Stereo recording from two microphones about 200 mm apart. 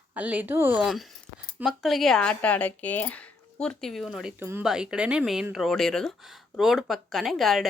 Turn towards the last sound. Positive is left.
turn(degrees=0)  # may be behind; listen again after turning